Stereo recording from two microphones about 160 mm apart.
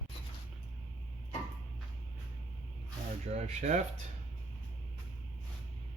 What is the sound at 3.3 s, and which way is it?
Speech, 45° right (ahead or behind).